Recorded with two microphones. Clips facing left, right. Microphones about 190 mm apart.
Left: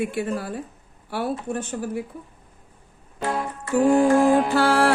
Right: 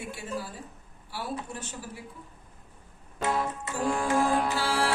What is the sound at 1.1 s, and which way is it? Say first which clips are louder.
Speech: left 9 dB; 55° left (ahead or behind).